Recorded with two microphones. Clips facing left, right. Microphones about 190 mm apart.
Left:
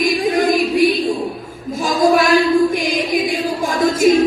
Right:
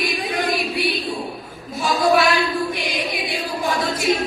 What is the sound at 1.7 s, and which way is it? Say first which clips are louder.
Music: left 4 dB; 40° left (ahead or behind).